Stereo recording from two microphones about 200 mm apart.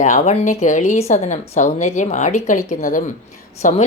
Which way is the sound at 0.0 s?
35° left (ahead or behind).